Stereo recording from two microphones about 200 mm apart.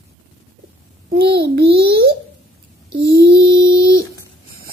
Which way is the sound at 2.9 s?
50° right (ahead or behind).